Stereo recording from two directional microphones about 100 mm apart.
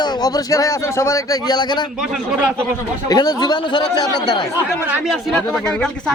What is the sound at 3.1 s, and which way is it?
Speech, 40° left (ahead or behind).